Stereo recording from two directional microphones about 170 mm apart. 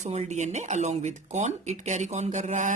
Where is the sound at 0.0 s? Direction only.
40° right (ahead or behind).